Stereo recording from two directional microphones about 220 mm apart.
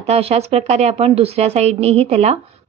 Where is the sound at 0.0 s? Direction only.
30° right (ahead or behind).